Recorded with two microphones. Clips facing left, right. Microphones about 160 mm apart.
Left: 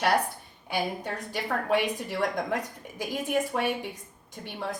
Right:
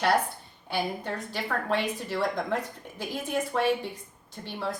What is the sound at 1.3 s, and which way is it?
A woman's voice, 15° left (ahead or behind).